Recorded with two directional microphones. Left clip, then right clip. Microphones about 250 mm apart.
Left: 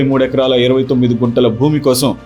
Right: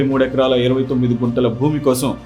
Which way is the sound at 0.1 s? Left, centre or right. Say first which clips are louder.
Left 4 dB; left.